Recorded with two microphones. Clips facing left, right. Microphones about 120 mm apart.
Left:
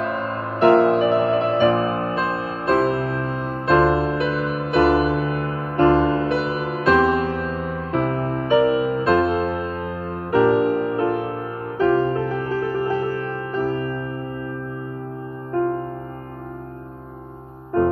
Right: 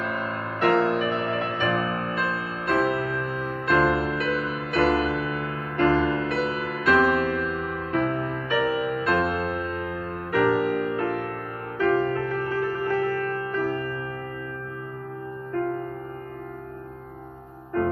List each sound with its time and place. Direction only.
0.0 s music: 35° left (ahead or behind)
15.5 s music: 30° left (ahead or behind)